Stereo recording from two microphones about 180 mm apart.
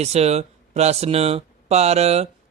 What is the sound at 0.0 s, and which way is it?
Speech, 35° right (ahead or behind).